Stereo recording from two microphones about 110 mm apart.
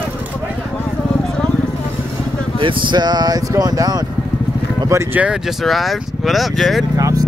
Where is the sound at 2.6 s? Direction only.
50° right (ahead or behind); by 5.2 s 25° right (ahead or behind).